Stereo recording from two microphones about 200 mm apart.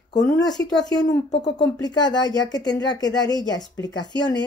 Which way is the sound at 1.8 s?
20° left (ahead or behind).